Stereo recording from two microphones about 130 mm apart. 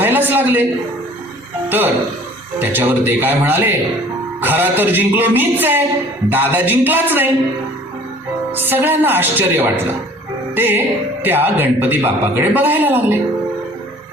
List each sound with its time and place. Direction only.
0.0 s a sound: 15° right (ahead or behind)
2.6 s speech: 15° right (ahead or behind)
8.5 s speech: 15° right (ahead or behind)